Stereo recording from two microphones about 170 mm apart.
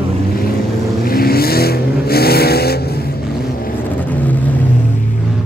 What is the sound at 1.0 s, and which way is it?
Vehicle, 60° left (ahead or behind).